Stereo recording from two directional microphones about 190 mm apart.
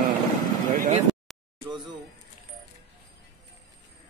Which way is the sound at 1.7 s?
25° right (ahead or behind).